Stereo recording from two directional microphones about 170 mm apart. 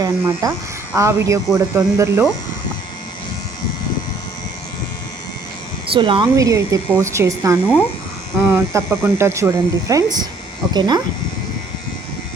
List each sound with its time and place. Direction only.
0.0 s speech: 20° right (ahead or behind)
5.9 s speech: 30° right (ahead or behind)
6.3 s speech: 20° right (ahead or behind)